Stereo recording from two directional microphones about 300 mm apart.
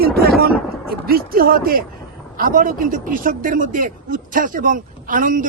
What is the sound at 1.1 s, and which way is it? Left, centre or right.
Speech, right.